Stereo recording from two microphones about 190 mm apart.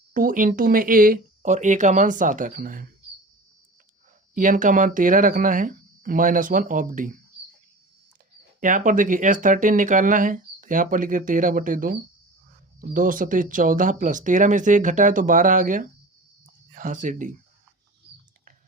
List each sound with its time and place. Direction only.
0.1 s speech: 45° right (ahead or behind)
4.4 s speech: 45° right (ahead or behind)
8.6 s speech: 45° right (ahead or behind)